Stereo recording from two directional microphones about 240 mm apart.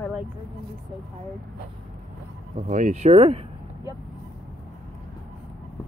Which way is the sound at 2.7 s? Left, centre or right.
Right.